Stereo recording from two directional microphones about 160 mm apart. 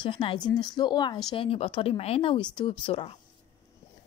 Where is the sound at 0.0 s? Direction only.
35° left (ahead or behind).